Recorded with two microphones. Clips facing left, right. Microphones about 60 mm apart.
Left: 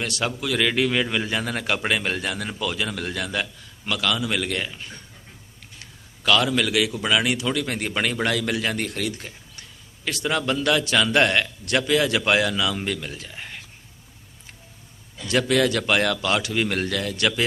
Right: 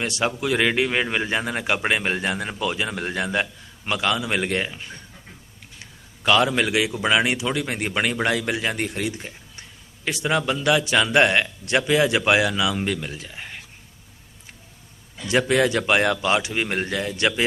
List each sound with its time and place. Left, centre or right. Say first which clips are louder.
0.0 s a man's voice: right 3 dB; right
5.8 s a man's voice: right 1 dB; right
15.3 s a man's voice: right 1 dB; right